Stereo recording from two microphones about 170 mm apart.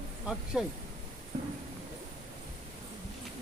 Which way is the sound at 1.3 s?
45° right (ahead or behind).